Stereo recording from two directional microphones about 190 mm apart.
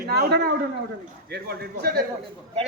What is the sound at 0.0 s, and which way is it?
A man's voice, 55° right (ahead or behind).